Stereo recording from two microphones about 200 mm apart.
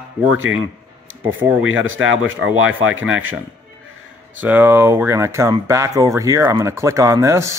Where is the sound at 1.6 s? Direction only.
85° right.